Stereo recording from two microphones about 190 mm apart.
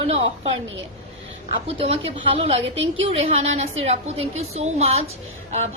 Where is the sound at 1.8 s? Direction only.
30° right (ahead or behind).